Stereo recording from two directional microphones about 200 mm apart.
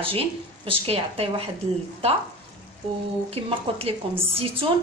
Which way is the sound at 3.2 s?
30° right (ahead or behind).